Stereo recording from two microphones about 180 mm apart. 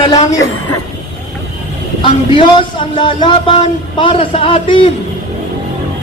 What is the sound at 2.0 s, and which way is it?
Speech, 25° left (ahead or behind).